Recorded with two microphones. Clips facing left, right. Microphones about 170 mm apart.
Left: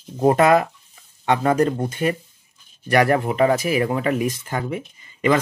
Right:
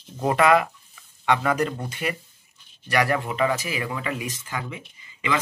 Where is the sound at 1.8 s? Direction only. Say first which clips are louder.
Left 7 dB; 45° left (ahead or behind).